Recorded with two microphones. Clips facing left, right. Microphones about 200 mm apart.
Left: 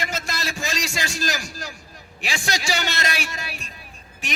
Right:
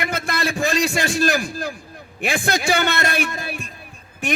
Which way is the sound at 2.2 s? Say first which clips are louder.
Right 6 dB; 55° right (ahead or behind).